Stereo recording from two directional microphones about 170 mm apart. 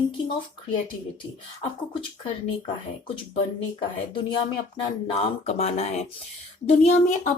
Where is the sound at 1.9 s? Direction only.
30° left (ahead or behind).